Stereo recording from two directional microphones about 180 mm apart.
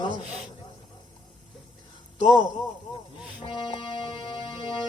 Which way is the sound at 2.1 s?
25° left (ahead or behind).